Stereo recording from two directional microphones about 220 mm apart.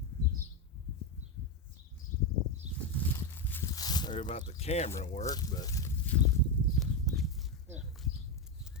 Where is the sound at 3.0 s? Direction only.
10° left (ahead or behind); by 4.9 s 30° left (ahead or behind).